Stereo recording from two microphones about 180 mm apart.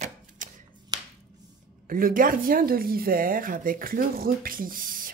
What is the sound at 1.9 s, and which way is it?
Speech, 50° right (ahead or behind).